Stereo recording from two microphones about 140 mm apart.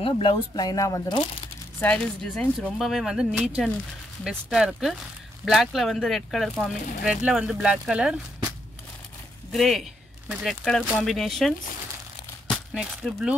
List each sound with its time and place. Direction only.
0.0 s speech: 40° left (ahead or behind); by 1.1 s 25° left (ahead or behind)
1.8 s speech: 10° left (ahead or behind); by 8.5 s 5° right (ahead or behind)
9.5 s speech: centre (ahead or behind)
12.7 s speech: centre (ahead or behind)